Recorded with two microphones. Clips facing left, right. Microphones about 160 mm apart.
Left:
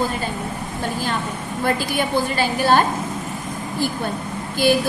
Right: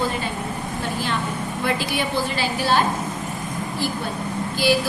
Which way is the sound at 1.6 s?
50° left (ahead or behind).